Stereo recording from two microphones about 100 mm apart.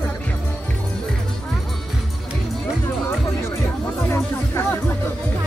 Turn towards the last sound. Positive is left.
turn(degrees=25)  # may be behind; listen again after turning